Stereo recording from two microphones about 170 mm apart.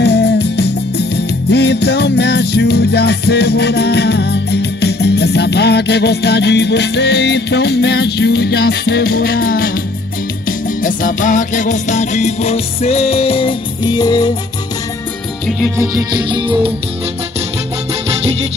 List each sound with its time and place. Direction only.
0.0 s music: 75° left (ahead or behind); by 9.7 s 60° left (ahead or behind)
10.8 s music: 50° left (ahead or behind); by 14.3 s 25° left (ahead or behind)
15.8 s music: 20° right (ahead or behind)
18.1 s music: 40° right (ahead or behind)